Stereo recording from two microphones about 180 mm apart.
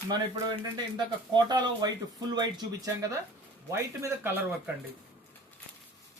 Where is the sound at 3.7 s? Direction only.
15° right (ahead or behind).